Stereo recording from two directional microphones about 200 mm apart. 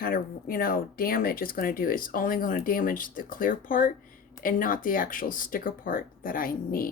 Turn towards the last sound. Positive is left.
turn(degrees=45)  # may be behind; listen again after turning